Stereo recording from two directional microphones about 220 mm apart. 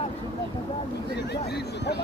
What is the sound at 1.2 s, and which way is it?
Speech, 50° left (ahead or behind).